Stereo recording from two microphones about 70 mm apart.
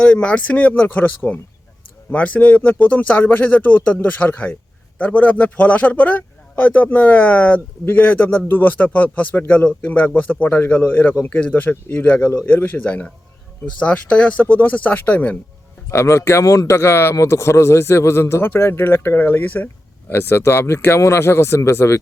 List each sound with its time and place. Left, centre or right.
0.0 s a man's voice: centre
15.9 s a man's voice: left